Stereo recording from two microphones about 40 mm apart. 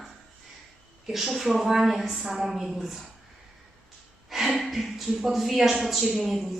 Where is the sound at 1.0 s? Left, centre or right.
Centre.